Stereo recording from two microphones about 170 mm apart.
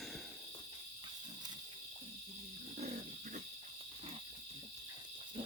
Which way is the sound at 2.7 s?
40° right (ahead or behind).